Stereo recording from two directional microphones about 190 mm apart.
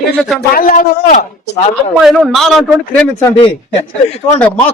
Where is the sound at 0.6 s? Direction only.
50° left (ahead or behind).